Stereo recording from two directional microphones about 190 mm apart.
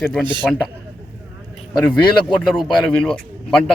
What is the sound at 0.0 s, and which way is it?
Speech, 5° left (ahead or behind).